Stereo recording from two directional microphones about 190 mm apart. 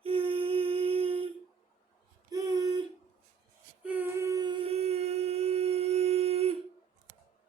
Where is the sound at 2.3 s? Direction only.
20° right (ahead or behind).